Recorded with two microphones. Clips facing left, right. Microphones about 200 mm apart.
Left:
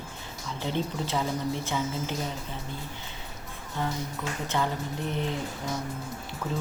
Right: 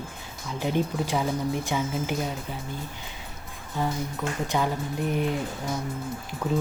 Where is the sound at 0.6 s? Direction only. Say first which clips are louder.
Right 4 dB; 15° right (ahead or behind).